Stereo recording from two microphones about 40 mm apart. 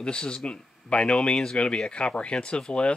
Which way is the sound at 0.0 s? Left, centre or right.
Left.